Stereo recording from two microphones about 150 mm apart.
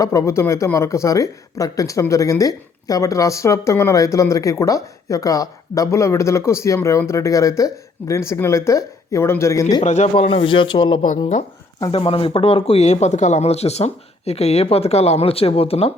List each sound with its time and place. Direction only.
0.0 s speech: 20° left (ahead or behind)
9.8 s speech: 50° left (ahead or behind)
10.2 s speech: 35° left (ahead or behind)